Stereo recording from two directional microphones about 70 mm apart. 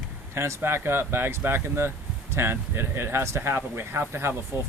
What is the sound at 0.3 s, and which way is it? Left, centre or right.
Speech, right.